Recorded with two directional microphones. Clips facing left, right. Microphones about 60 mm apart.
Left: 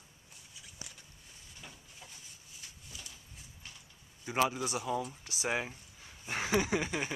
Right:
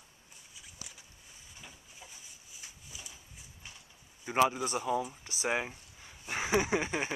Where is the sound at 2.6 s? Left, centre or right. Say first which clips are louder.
Right 1 dB; centre.